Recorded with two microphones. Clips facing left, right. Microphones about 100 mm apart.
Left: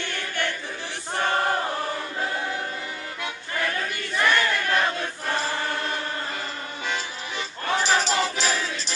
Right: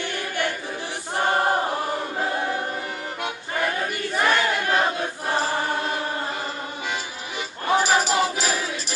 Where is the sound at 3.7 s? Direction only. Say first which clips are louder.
Right 3 dB; 25° right (ahead or behind); by 6.0 s 10° right (ahead or behind).